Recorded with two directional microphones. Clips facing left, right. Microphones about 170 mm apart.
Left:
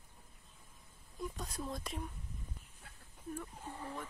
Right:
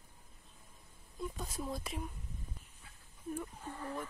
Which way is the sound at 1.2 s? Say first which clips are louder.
Right 1 dB; centre (ahead or behind).